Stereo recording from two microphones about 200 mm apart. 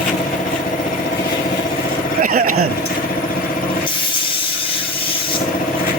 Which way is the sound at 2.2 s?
45° right (ahead or behind).